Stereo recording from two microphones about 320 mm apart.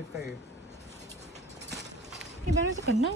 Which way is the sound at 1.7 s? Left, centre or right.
Centre.